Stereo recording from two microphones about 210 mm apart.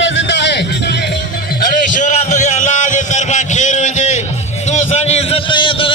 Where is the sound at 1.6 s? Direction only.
40° left (ahead or behind).